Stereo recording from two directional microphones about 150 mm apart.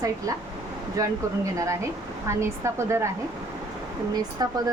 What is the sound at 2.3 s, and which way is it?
Speech, 20° right (ahead or behind).